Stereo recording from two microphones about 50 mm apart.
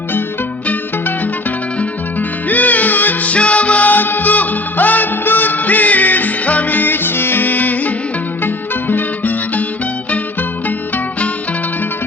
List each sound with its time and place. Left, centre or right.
0.7 s music: left
10.7 s music: left